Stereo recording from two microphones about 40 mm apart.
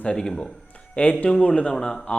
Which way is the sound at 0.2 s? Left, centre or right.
Centre.